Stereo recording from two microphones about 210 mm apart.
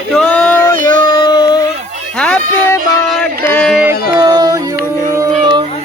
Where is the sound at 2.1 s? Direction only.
5° left (ahead or behind).